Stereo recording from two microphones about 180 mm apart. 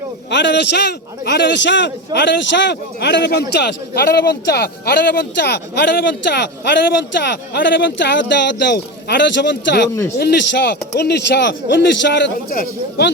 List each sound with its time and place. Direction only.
0.3 s a man's voice: 75° left (ahead or behind)
12.5 s speech: 55° left (ahead or behind)